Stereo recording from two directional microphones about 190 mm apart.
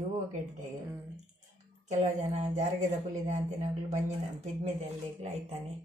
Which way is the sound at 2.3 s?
35° right (ahead or behind).